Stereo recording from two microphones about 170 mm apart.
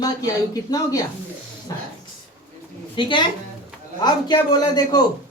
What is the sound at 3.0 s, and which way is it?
Speech, 30° left (ahead or behind).